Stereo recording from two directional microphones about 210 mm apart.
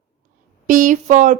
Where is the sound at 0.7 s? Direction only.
40° right (ahead or behind).